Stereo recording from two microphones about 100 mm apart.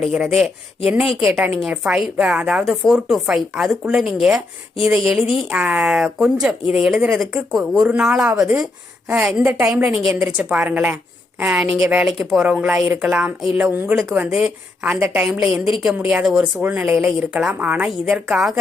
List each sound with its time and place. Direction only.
0.9 s a woman's voice: 5° right (ahead or behind)
9.6 s a woman's voice: 10° right (ahead or behind)
13.6 s a woman's voice: 20° right (ahead or behind)
13.9 s a woman's voice: centre (ahead or behind)
14.2 s a woman's voice: 10° right (ahead or behind)
16.6 s a woman's voice: 15° right (ahead or behind)